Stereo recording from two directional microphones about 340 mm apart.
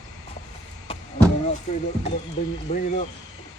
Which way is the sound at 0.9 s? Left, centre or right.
Centre.